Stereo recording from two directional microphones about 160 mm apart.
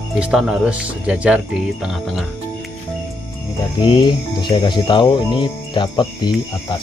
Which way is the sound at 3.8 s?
30° left (ahead or behind).